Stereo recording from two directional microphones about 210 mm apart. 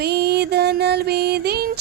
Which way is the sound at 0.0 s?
50° right (ahead or behind).